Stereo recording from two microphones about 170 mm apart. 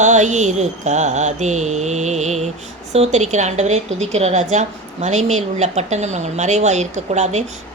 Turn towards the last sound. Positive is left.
turn(degrees=-40)  # may be behind; listen again after turning